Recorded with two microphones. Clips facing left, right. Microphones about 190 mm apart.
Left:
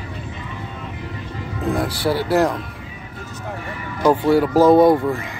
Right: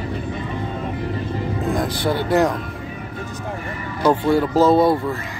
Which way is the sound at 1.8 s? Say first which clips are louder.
Even; 5° left (ahead or behind).